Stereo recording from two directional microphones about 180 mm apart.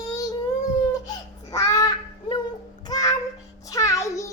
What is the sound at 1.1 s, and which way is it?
Babbling, 20° left (ahead or behind).